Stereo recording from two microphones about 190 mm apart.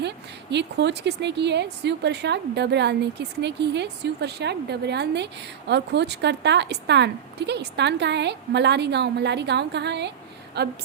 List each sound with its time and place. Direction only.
0.5 s speech: 65° right (ahead or behind)